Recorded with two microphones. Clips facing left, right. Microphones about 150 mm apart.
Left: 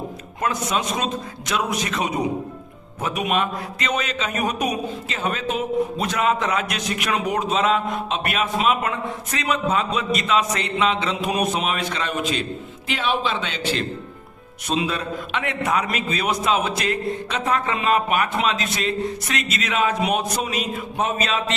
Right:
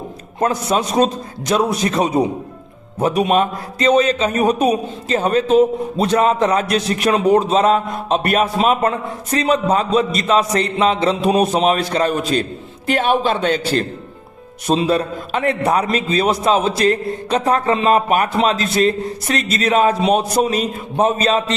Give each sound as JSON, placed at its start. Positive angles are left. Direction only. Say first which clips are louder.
{"t": 0.3, "sound": "a man's voice", "louder": "right 6 dB", "side_deg": -35}